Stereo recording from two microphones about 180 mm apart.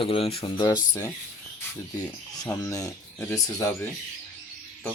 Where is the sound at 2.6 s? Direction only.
20° left (ahead or behind).